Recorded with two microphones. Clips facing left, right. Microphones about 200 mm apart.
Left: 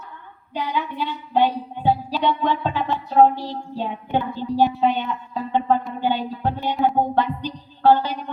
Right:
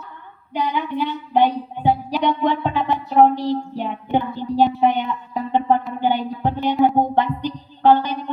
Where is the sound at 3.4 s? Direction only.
15° right (ahead or behind).